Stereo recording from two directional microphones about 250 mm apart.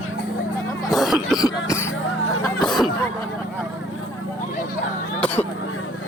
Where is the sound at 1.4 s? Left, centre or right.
Centre.